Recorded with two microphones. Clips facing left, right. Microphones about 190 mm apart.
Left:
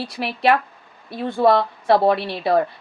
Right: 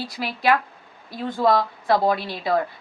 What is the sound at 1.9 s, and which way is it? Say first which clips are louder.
Speech: left 4 dB; 25° left (ahead or behind).